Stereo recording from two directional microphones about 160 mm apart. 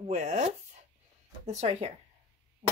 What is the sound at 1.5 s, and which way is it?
Speech, 40° right (ahead or behind).